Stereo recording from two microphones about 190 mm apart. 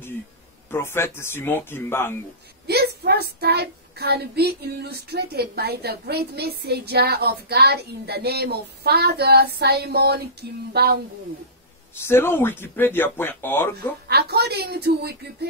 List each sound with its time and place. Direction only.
0.7 s speech: 15° left (ahead or behind)
2.6 s a child's voice: 60° right (ahead or behind)
12.0 s speech: 15° left (ahead or behind)
14.0 s a child's voice: 60° right (ahead or behind)